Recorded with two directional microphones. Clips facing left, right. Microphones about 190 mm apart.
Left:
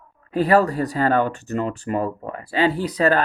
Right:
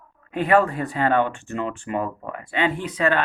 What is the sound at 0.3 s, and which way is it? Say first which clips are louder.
Speech: left 2 dB; 35° left (ahead or behind).